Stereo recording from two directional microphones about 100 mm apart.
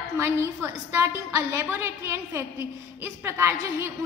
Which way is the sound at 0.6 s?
30° right (ahead or behind).